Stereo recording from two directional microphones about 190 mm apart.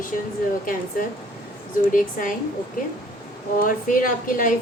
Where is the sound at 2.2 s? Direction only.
45° left (ahead or behind).